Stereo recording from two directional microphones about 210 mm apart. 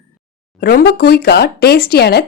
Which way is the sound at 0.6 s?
45° left (ahead or behind).